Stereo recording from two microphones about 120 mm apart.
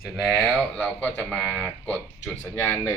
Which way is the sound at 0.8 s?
10° left (ahead or behind).